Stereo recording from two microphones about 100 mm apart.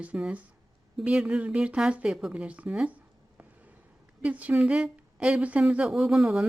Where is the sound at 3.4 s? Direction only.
15° right (ahead or behind).